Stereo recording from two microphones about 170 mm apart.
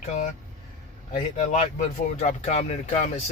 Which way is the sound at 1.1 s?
45° left (ahead or behind).